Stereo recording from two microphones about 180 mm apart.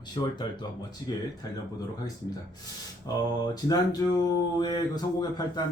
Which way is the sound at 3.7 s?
20° left (ahead or behind).